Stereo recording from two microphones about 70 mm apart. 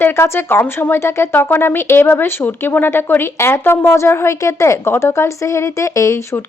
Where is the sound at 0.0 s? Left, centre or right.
Left.